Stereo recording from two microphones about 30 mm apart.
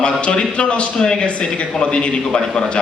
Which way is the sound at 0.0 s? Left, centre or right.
Left.